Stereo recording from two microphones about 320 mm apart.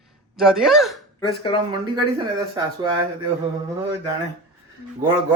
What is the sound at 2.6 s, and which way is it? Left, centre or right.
Speech, centre.